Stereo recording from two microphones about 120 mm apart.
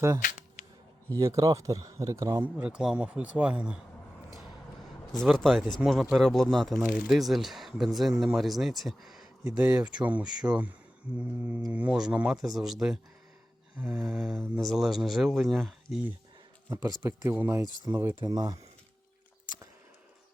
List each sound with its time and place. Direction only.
1.1 s speech: 25° right (ahead or behind)
2.4 s speech: 10° right (ahead or behind)
5.1 s speech: centre (ahead or behind)
17.0 s speech: 20° right (ahead or behind)